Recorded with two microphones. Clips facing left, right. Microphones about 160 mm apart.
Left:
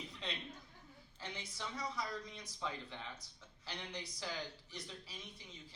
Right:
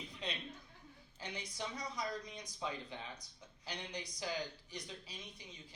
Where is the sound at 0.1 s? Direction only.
15° right (ahead or behind).